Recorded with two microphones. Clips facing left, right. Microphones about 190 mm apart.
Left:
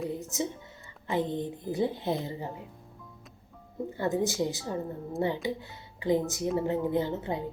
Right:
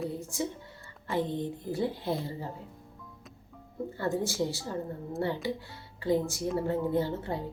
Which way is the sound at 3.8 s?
20° left (ahead or behind).